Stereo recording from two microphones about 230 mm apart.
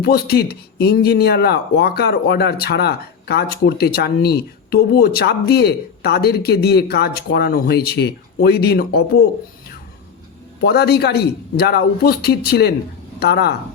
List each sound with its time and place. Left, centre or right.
0.0 s speech: left
10.6 s speech: left